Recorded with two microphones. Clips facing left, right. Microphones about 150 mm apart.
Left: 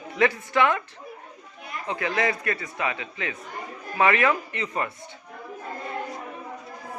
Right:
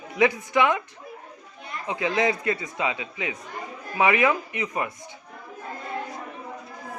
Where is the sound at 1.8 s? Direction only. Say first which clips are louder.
Right 2 dB; 15° right (ahead or behind).